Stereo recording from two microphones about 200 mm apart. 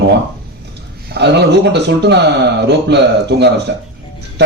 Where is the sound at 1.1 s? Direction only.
60° right (ahead or behind).